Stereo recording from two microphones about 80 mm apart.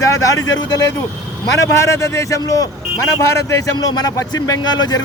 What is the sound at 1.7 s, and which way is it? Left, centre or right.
A man's voice, left.